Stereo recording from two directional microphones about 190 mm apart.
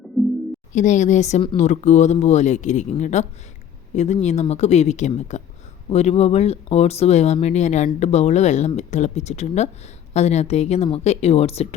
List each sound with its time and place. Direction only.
0.2 s music: centre (ahead or behind)
0.7 s speech: 40° left (ahead or behind)